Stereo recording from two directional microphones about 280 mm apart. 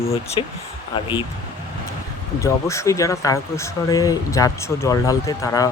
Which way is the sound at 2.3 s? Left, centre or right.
Centre.